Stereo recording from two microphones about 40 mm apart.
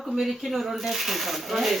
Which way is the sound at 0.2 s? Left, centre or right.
Centre.